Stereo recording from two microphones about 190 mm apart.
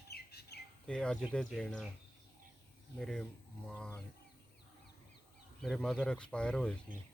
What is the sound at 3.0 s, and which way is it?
Speech, 5° left (ahead or behind).